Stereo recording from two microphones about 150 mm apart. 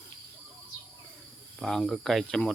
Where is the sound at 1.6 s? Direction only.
Centre (ahead or behind).